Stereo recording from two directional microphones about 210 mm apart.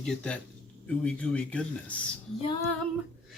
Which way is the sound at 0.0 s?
5° left (ahead or behind).